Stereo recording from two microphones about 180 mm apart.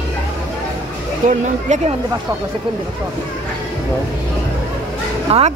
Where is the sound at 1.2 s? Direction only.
40° right (ahead or behind).